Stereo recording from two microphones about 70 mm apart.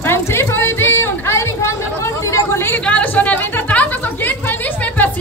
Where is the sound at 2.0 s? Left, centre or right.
Left.